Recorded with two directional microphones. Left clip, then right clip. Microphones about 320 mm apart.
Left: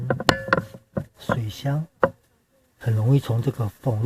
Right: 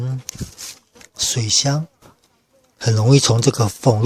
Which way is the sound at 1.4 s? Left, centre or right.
Centre.